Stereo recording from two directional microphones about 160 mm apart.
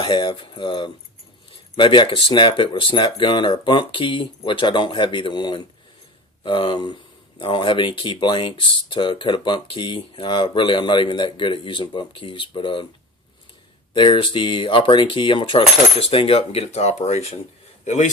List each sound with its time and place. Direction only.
0.0 s speech: 30° left (ahead or behind)
13.9 s a man's voice: 30° left (ahead or behind)